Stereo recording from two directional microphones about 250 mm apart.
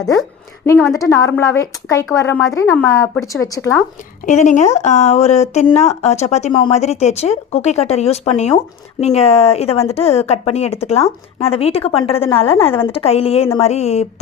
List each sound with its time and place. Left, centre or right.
0.2 s a woman's voice: centre
4.3 s speech: left